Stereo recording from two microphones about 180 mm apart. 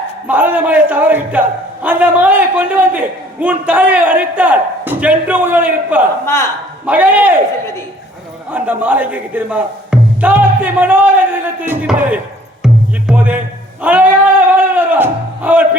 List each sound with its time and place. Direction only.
0.3 s a man's voice: 10° right (ahead or behind)
6.2 s a man's voice: 15° left (ahead or behind)
6.8 s a man's voice: 10° right (ahead or behind)
8.4 s a man's voice: 10° right (ahead or behind)
12.6 s music: 5° right (ahead or behind)